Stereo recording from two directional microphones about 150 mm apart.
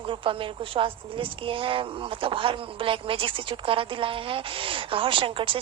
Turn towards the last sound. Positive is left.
turn(degrees=-35)  # may be behind; listen again after turning